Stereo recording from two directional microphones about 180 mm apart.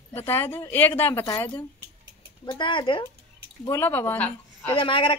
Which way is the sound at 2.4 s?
25° left (ahead or behind).